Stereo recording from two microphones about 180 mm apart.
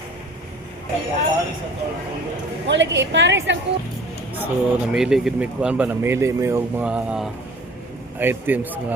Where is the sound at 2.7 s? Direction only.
80° right.